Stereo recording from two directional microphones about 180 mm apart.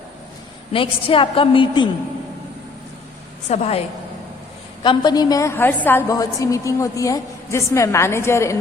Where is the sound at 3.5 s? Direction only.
35° left (ahead or behind).